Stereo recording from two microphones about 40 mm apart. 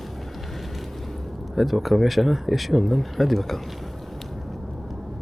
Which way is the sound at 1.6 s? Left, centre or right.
Centre.